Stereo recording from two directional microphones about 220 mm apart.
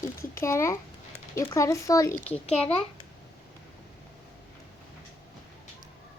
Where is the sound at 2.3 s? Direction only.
30° left (ahead or behind).